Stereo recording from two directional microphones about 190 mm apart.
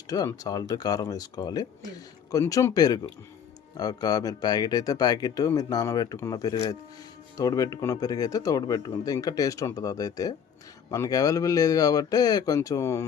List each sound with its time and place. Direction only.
0.1 s speech: 20° left (ahead or behind)